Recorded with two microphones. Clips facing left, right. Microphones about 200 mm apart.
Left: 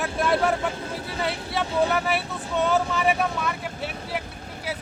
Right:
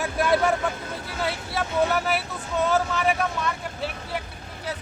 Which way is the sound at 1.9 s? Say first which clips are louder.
Even; centre (ahead or behind).